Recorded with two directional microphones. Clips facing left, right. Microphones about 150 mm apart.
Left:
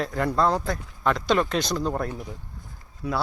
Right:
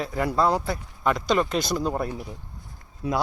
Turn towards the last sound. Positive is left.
turn(degrees=-25)  # may be behind; listen again after turning